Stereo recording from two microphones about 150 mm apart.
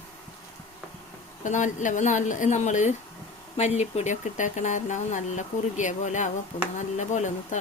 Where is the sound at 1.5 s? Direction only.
55° left (ahead or behind).